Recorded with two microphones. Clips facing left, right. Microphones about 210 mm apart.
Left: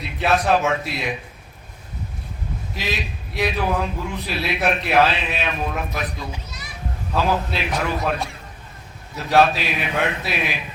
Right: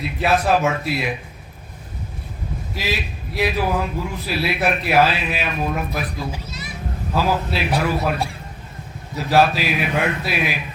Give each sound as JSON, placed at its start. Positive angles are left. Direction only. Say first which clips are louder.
{"t": 0.0, "sound": "a man's voice", "louder": "right 1 dB", "side_deg": 0}
{"t": 2.7, "sound": "a man's voice", "louder": "right 2 dB", "side_deg": 0}
{"t": 6.3, "sound": "children playing", "louder": "right 4 dB", "side_deg": -25}
{"t": 7.1, "sound": "a man's voice", "louder": "right 1 dB", "side_deg": -5}
{"t": 9.1, "sound": "a man's voice", "louder": "even", "side_deg": 0}